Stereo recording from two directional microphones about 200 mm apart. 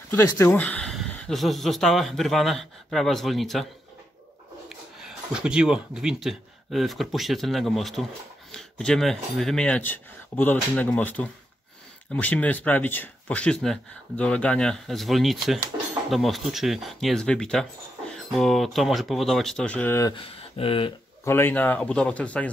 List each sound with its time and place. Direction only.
0.1 s a man's voice: 15° left (ahead or behind); by 3.6 s centre (ahead or behind)
4.6 s speech: 5° right (ahead or behind); by 20.9 s 25° left (ahead or behind)
21.2 s a man's voice: 10° left (ahead or behind)